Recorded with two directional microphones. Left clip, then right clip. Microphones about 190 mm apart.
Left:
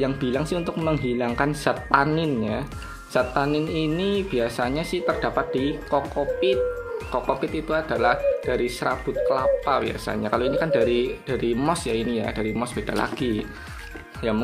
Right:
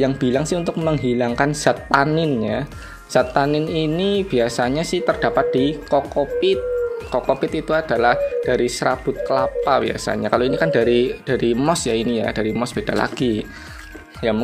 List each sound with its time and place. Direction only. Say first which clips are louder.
0.0 s speech: right 6 dB; 30° right (ahead or behind)
7.1 s speech: right 3 dB; 30° right (ahead or behind)